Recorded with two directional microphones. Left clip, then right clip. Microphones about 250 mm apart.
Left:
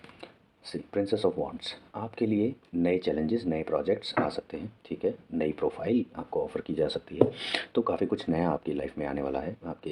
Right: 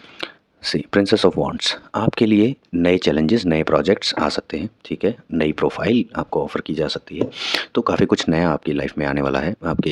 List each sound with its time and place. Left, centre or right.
0.2 s speech: right